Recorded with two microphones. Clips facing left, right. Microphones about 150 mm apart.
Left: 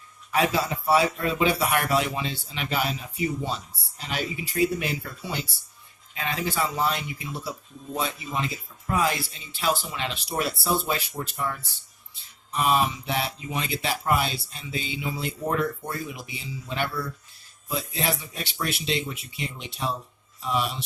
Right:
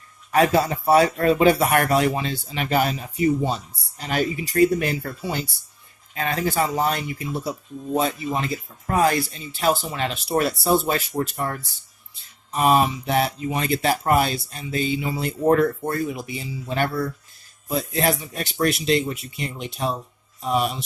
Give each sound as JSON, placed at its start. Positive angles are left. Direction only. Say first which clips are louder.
{"t": 0.3, "sound": "speech", "louder": "right 6 dB", "side_deg": -45}
{"t": 12.5, "sound": "speech", "louder": "right 5 dB", "side_deg": -45}